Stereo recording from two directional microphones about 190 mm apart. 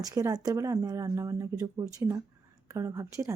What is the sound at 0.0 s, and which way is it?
Speech, 15° right (ahead or behind).